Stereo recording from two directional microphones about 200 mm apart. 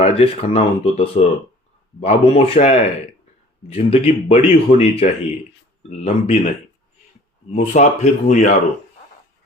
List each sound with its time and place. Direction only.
0.0 s speech: 30° left (ahead or behind)
7.5 s speech: 35° left (ahead or behind)